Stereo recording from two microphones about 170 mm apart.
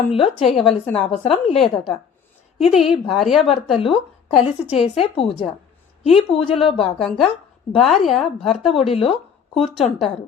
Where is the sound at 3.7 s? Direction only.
35° left (ahead or behind).